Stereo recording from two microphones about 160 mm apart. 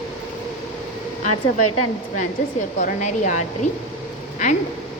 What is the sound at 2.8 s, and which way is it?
Speech, 50° left (ahead or behind).